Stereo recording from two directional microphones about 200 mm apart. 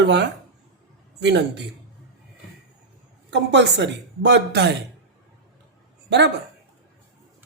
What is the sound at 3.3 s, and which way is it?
A woman's voice, 60° right (ahead or behind).